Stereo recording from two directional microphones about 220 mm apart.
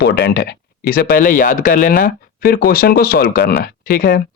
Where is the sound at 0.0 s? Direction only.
45° left (ahead or behind).